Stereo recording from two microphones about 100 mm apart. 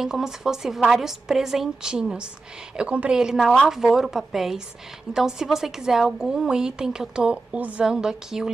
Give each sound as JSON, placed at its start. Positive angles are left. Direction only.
{"t": 0.0, "sound": "a woman's voice", "side_deg": -5}